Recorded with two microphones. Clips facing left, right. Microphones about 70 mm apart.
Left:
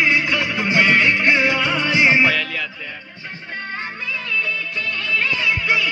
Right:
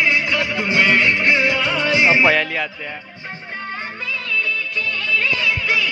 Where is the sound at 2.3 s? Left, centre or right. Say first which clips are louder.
Right 4 dB; right.